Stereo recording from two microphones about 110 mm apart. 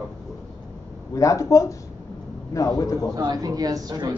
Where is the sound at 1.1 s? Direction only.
30° left (ahead or behind).